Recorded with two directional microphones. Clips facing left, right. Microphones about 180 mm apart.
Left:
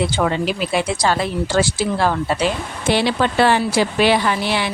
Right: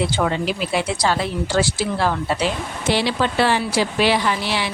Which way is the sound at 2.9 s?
55° left (ahead or behind).